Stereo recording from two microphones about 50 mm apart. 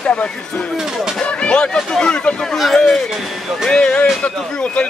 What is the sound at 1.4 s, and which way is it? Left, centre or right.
Speech, centre.